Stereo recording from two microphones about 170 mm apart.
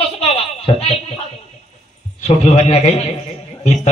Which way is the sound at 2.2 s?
35° left (ahead or behind).